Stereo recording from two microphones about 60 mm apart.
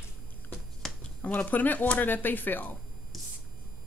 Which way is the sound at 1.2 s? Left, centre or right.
Left.